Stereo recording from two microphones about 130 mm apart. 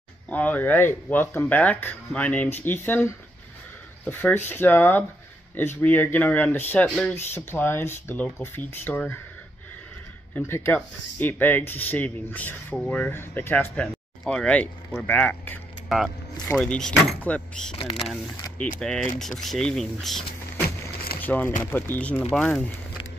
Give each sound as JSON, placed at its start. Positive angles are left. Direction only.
{"t": 0.3, "sound": "speech", "side_deg": 10}
{"t": 10.3, "sound": "speech", "side_deg": 20}
{"t": 14.2, "sound": "speech", "side_deg": 5}
{"t": 17.7, "sound": "speech", "side_deg": 45}
{"t": 18.8, "sound": "speech", "side_deg": 5}
{"t": 21.2, "sound": "speech", "side_deg": 15}